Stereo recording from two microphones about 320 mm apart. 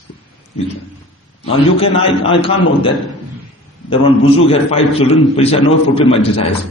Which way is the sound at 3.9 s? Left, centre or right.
Centre.